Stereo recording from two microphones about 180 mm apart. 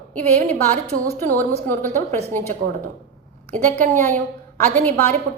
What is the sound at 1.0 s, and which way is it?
Speech, 50° right (ahead or behind).